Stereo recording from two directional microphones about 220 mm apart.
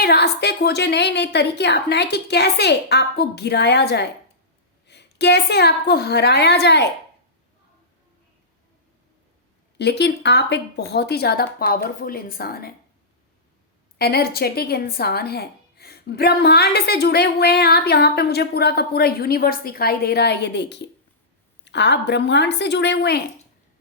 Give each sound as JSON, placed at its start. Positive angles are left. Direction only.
{"t": 0.0, "sound": "a woman's voice", "side_deg": 50}
{"t": 9.7, "sound": "a woman's voice", "side_deg": 50}
{"t": 14.0, "sound": "a woman's voice", "side_deg": 45}